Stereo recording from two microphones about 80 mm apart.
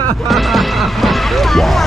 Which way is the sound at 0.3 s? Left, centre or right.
Centre.